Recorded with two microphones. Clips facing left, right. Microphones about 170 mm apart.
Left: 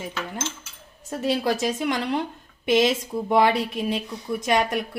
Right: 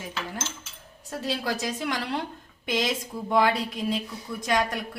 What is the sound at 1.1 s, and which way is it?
A woman's voice, 20° left (ahead or behind).